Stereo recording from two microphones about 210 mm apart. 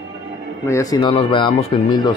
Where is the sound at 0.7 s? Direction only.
15° left (ahead or behind).